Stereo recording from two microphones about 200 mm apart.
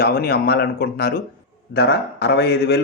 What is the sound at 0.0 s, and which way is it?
A man's voice, 50° left (ahead or behind).